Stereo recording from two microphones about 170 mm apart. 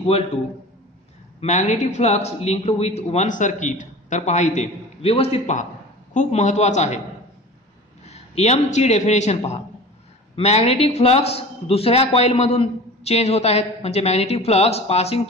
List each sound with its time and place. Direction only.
1.4 s a man's voice: 40° left (ahead or behind)
8.0 s a man's voice: 40° left (ahead or behind)